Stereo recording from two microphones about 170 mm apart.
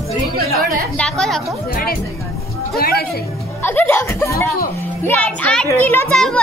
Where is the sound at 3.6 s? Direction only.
10° left (ahead or behind).